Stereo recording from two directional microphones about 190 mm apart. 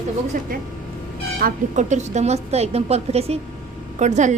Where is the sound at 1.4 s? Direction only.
40° right (ahead or behind).